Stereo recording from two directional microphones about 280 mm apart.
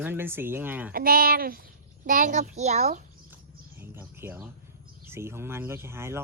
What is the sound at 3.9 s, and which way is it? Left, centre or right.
Speech, centre.